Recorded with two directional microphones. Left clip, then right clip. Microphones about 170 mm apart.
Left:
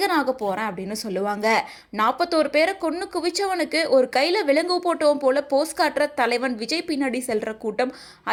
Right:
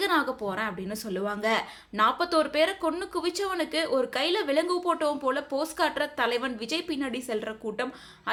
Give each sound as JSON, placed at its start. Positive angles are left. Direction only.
{"t": 0.0, "sound": "a woman's voice", "side_deg": 30}